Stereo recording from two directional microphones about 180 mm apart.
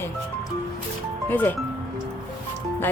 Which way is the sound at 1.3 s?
10° left (ahead or behind).